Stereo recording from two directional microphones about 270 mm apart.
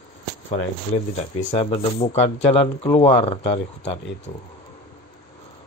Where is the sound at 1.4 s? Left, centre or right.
Left.